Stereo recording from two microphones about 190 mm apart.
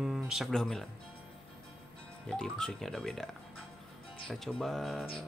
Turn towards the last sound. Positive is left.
turn(degrees=0)  # may be behind; listen again after turning